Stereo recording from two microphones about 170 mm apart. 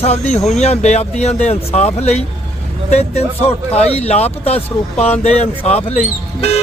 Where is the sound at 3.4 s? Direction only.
40° left (ahead or behind).